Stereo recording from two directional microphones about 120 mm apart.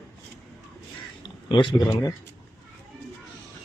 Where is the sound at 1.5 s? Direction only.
35° left (ahead or behind).